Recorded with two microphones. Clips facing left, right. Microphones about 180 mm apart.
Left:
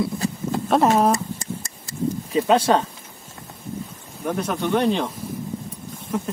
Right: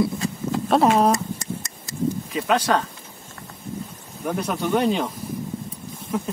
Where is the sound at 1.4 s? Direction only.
30° left (ahead or behind).